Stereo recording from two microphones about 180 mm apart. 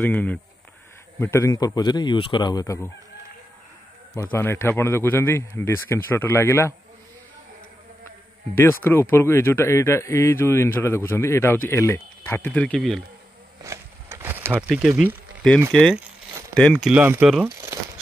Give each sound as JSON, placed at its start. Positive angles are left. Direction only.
{"t": 0.0, "sound": "a man's voice", "side_deg": 10}
{"t": 4.1, "sound": "a man's voice", "side_deg": 15}
{"t": 8.5, "sound": "a man's voice", "side_deg": 10}
{"t": 13.7, "sound": "a sound", "side_deg": -15}
{"t": 15.7, "sound": "speech", "side_deg": 0}
{"t": 16.9, "sound": "speech", "side_deg": -10}